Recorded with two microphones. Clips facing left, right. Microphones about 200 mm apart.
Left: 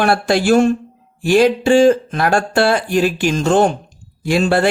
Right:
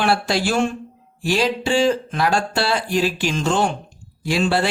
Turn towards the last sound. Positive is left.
turn(degrees=50)  # may be behind; listen again after turning